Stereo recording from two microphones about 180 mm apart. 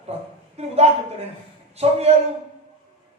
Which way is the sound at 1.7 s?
35° right (ahead or behind).